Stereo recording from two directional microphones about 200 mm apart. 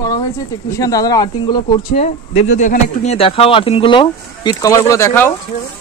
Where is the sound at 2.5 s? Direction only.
35° left (ahead or behind); by 5.3 s 10° left (ahead or behind).